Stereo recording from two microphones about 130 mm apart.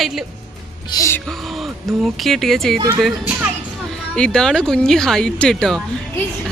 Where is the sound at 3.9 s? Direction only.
5° left (ahead or behind).